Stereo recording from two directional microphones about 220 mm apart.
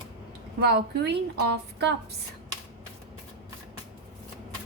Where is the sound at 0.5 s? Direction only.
50° right (ahead or behind).